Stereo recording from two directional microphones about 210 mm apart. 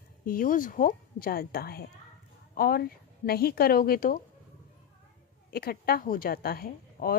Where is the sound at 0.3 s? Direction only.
40° left (ahead or behind).